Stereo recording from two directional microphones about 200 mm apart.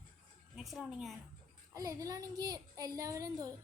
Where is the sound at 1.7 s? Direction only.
15° right (ahead or behind).